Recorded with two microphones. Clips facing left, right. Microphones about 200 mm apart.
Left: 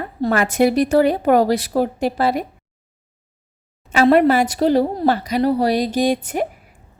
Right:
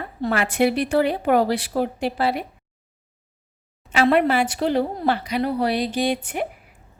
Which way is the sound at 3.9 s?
40° left (ahead or behind).